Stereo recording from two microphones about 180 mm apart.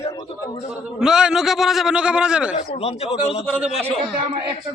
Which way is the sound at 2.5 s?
35° left (ahead or behind).